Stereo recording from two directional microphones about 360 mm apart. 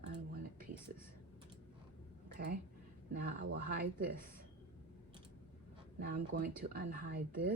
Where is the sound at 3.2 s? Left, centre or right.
Right.